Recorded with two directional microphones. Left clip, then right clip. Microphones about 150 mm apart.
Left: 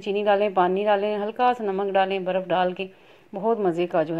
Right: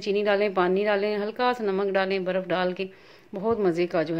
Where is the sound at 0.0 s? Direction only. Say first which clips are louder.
Left 2 dB; centre (ahead or behind).